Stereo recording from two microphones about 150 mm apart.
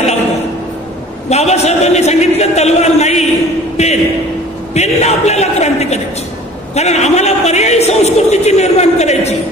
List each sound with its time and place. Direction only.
1.3 s a man's voice: 45° left (ahead or behind)
3.7 s a sound: 45° left (ahead or behind)
4.7 s a man's voice: 45° left (ahead or behind)